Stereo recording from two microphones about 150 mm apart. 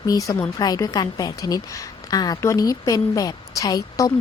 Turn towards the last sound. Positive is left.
turn(degrees=25)  # may be behind; listen again after turning